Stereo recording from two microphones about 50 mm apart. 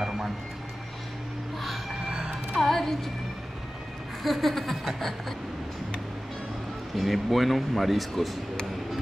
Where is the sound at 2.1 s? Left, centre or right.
Centre.